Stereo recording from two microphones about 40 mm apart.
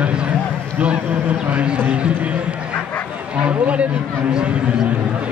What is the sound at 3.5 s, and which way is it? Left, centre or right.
A man's voice, right.